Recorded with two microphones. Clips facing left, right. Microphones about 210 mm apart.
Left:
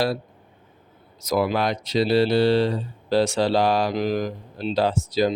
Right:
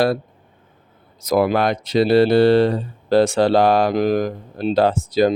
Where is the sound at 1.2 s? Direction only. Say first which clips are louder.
Right 5 dB; 55° right (ahead or behind).